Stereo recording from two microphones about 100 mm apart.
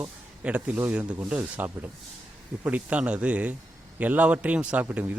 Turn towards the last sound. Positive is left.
turn(degrees=-20)  # may be behind; listen again after turning